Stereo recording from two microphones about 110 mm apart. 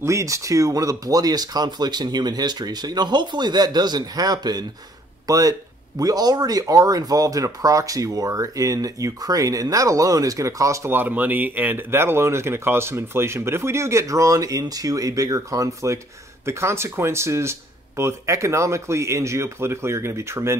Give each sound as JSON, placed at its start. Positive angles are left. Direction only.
{"t": 0.0, "sound": "speech", "side_deg": -30}